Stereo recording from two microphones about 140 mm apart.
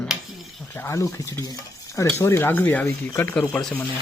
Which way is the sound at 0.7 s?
20° left (ahead or behind).